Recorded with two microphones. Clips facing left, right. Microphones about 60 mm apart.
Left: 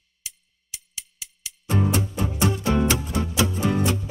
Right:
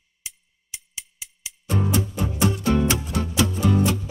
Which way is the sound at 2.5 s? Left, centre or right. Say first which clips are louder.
Right 1 dB; left.